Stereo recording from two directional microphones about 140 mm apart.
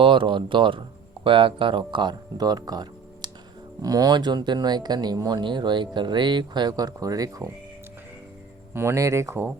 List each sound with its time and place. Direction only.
0.0 s speech: 35° right (ahead or behind)
8.7 s speech: 20° right (ahead or behind)